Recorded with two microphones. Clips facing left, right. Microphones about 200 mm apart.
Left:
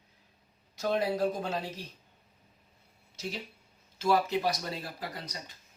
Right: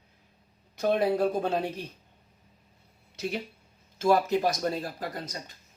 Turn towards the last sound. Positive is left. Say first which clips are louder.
# right 5 dB
turn(degrees=-45)  # may be behind; listen again after turning